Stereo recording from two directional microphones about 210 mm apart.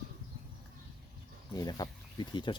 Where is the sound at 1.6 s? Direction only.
20° left (ahead or behind).